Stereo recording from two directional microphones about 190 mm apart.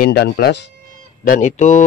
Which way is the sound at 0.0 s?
60° left (ahead or behind).